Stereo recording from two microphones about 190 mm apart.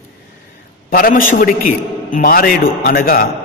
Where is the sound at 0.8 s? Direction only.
45° left (ahead or behind).